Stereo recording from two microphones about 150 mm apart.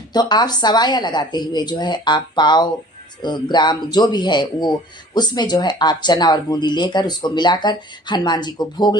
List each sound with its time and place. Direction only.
0.1 s speech: 30° left (ahead or behind)